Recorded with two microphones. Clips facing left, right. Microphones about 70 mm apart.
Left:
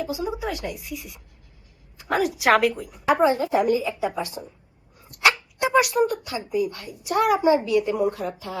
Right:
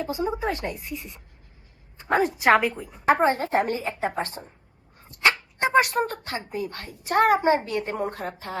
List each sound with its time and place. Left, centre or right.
0.0 s a woman's voice: right
3.2 s speech: right